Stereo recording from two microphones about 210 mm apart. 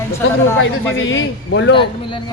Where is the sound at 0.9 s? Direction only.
65° left (ahead or behind).